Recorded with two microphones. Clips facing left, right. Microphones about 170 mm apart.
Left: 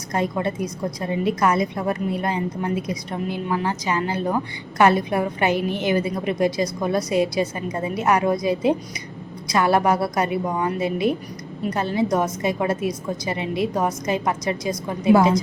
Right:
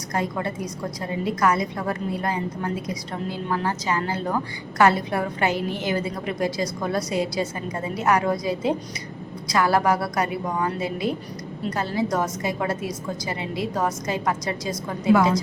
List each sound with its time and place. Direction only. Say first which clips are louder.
0.1 s a woman's voice: left 3 dB; 20° left (ahead or behind)